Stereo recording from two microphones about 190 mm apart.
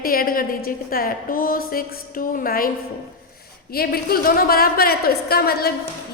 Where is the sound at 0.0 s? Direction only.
50° left (ahead or behind).